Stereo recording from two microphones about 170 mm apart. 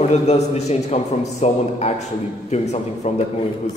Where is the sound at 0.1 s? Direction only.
40° left (ahead or behind).